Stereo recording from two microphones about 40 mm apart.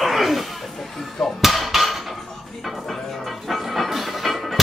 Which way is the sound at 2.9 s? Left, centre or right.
Centre.